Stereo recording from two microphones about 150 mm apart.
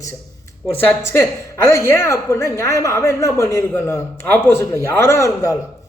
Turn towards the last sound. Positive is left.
turn(degrees=20)  # may be behind; listen again after turning